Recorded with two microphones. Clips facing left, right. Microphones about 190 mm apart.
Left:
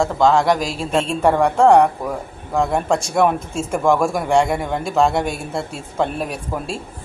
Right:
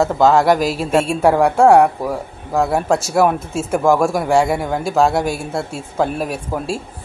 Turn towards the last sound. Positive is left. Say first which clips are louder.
# right 3 dB
turn(degrees=0)  # may be behind; listen again after turning